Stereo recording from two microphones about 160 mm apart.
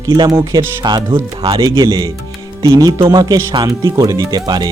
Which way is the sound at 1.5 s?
35° right (ahead or behind).